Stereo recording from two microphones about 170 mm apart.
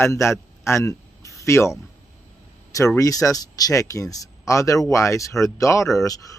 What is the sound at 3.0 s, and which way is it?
Speech, 20° left (ahead or behind).